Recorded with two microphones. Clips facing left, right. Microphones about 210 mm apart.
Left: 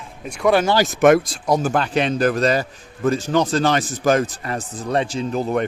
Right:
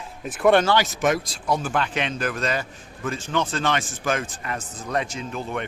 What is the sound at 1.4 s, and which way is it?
A man's voice, 40° left (ahead or behind).